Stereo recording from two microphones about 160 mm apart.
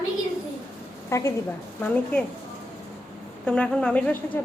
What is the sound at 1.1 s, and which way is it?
A woman's voice, 15° left (ahead or behind).